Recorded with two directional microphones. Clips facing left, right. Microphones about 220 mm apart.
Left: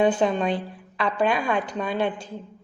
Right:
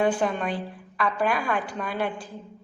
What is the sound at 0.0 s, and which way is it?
Speech, 20° left (ahead or behind).